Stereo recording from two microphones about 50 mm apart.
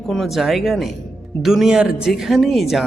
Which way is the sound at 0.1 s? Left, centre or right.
Centre.